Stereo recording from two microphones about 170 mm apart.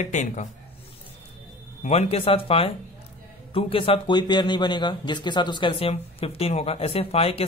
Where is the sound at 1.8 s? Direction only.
40° left (ahead or behind).